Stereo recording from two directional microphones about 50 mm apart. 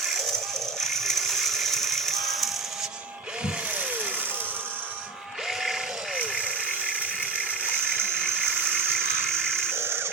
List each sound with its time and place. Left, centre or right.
0.8 s ratchet: centre
6.1 s vehicle: right
7.9 s a sound: centre
9.7 s music: right